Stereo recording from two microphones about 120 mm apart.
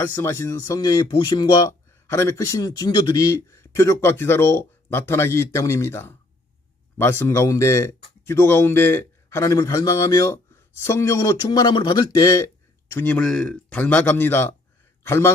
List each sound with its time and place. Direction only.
0.0 s speech: 20° left (ahead or behind)
12.9 s a man's voice: 15° left (ahead or behind)